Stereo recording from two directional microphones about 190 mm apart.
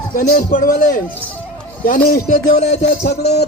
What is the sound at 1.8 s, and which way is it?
Speech, 50° left (ahead or behind).